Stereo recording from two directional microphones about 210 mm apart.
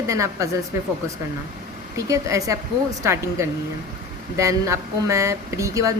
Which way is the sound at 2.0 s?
15° right (ahead or behind).